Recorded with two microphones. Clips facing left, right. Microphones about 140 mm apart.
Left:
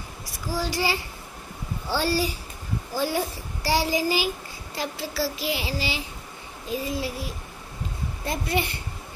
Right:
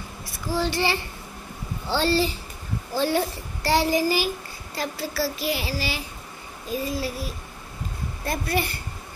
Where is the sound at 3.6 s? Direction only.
10° left (ahead or behind).